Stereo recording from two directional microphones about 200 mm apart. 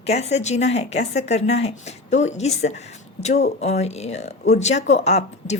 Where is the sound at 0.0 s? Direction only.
30° left (ahead or behind).